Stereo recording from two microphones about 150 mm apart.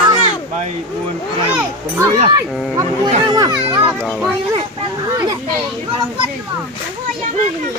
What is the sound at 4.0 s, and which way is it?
Speech, 5° left (ahead or behind).